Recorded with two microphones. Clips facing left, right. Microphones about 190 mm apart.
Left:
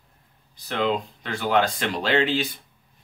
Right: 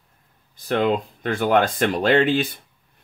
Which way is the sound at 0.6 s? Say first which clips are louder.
Right 4 dB; 50° right (ahead or behind).